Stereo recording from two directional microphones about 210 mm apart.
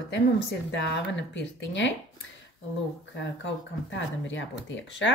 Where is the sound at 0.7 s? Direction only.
60° left (ahead or behind).